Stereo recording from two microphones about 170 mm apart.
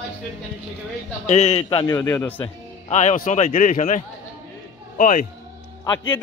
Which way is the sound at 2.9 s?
45° left (ahead or behind).